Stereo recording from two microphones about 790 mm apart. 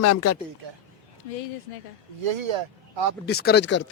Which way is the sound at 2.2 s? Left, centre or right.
Right.